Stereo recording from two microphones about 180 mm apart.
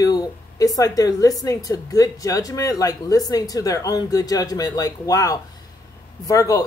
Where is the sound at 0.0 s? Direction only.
20° left (ahead or behind).